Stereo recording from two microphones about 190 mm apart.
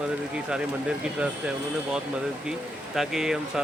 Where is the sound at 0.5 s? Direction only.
5° right (ahead or behind).